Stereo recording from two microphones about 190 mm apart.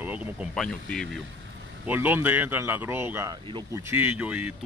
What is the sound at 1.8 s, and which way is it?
Speech, 10° right (ahead or behind).